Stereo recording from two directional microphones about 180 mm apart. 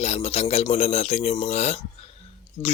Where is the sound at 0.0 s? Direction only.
35° left (ahead or behind).